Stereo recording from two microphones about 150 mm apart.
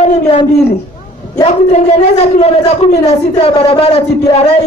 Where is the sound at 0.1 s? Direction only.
40° left (ahead or behind).